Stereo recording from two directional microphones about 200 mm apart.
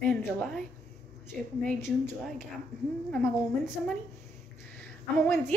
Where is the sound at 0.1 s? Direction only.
Centre (ahead or behind).